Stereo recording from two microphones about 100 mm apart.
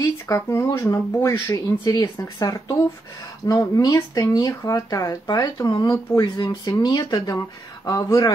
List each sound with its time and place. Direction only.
0.5 s speech: 30° left (ahead or behind)